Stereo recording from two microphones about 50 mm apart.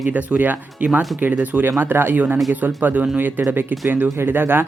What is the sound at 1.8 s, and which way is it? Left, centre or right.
Speech, right.